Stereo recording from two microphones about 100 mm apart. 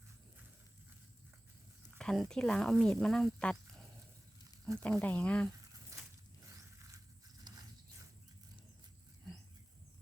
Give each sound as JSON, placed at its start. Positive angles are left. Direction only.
{"t": 2.0, "sound": "speech", "side_deg": 5}
{"t": 5.9, "sound": "squish", "side_deg": -30}
{"t": 7.5, "sound": "mechanisms", "side_deg": -45}